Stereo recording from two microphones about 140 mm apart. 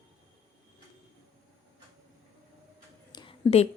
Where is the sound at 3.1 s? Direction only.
30° left (ahead or behind).